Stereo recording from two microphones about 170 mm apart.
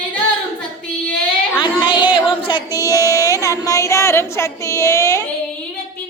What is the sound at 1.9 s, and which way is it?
Singing, 25° left (ahead or behind).